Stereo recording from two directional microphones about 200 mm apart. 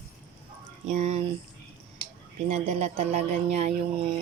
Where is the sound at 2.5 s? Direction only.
30° right (ahead or behind).